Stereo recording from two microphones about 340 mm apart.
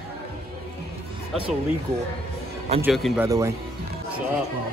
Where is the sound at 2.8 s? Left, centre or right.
Centre.